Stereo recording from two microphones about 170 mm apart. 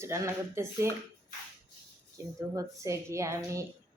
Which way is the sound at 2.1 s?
20° right (ahead or behind).